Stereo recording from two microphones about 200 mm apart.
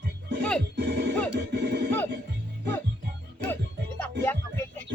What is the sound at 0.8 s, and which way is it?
Music, 55° right (ahead or behind).